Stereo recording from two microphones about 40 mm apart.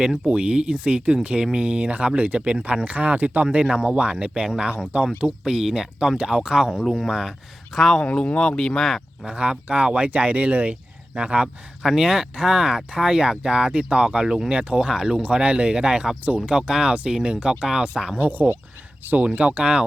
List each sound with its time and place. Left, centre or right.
0.3 s speech: right
3.6 s speech: centre
5.5 s speech: centre
6.7 s speech: centre
7.1 s speech: centre
7.7 s speech: centre
8.0 s speech: left; by 9.0 s centre
9.2 s speech: right
11.8 s speech: centre
16.9 s speech: right
18.2 s speech: right